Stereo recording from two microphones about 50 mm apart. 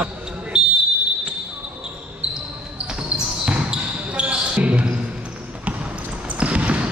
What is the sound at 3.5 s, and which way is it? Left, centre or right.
Basketball bounce, right.